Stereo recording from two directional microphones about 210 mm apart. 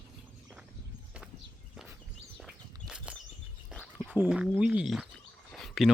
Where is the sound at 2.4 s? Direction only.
5° right (ahead or behind).